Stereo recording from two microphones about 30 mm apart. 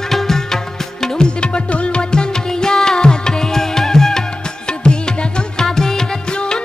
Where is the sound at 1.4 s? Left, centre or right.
Left.